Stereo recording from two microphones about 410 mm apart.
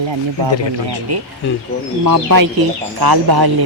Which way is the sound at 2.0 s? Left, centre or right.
Right.